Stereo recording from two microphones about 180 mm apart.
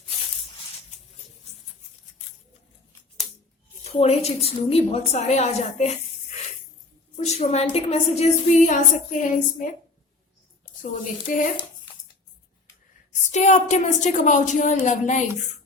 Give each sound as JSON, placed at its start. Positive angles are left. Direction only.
{"t": 3.8, "sound": "a woman's voice", "side_deg": 35}
{"t": 7.2, "sound": "a woman's voice", "side_deg": 35}
{"t": 11.3, "sound": "a woman's voice", "side_deg": 45}
{"t": 13.3, "sound": "a woman's voice", "side_deg": 40}